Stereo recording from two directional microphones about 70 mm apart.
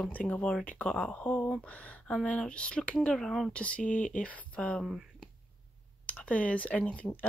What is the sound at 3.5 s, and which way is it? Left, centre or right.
Speech, centre.